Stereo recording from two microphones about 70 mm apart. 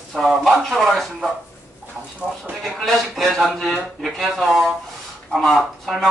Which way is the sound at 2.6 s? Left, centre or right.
Centre.